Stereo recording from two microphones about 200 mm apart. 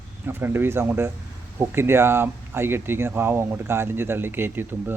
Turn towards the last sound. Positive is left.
turn(degrees=-10)  # may be behind; listen again after turning